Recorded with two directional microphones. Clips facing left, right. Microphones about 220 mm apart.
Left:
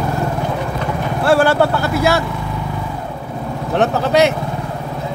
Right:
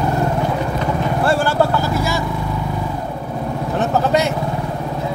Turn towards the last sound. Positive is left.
turn(degrees=85)